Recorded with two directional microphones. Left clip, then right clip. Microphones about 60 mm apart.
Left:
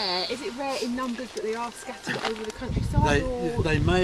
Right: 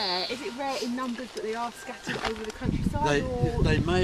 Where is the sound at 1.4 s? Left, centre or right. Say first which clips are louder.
Left 1 dB; right.